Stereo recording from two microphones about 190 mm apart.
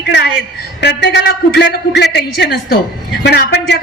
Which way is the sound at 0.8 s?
65° left (ahead or behind).